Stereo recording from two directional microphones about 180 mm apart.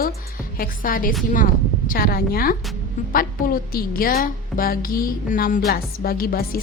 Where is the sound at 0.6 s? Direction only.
50° left (ahead or behind).